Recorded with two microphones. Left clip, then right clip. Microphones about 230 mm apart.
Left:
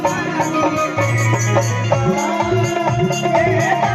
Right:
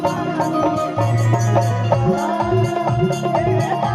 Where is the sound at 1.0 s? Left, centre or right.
Left.